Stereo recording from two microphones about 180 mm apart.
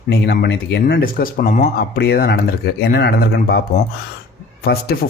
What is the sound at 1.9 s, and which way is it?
Speech, 65° left (ahead or behind).